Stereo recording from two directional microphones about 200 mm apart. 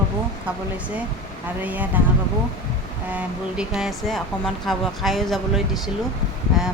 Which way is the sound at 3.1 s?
5° right (ahead or behind).